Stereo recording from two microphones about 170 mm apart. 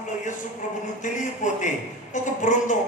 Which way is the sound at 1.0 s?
45° left (ahead or behind).